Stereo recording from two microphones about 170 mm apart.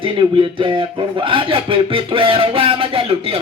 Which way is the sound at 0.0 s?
30° right (ahead or behind).